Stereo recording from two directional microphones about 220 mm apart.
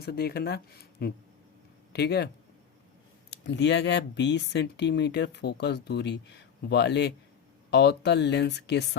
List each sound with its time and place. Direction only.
0.0 s speech: 45° left (ahead or behind)